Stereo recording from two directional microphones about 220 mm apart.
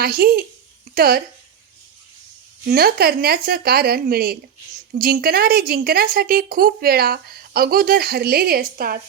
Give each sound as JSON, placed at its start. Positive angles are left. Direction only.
{"t": 0.0, "sound": "a woman's voice", "side_deg": -45}
{"t": 2.6, "sound": "a woman's voice", "side_deg": -45}